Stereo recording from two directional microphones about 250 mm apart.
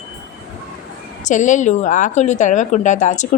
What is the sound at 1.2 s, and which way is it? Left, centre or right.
Speech, left.